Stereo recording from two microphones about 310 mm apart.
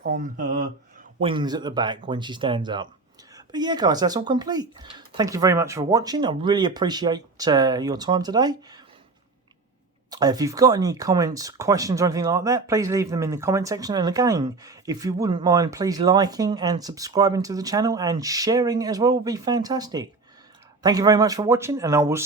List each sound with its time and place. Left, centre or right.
0.0 s speech: right; by 8.8 s centre
10.1 s speech: centre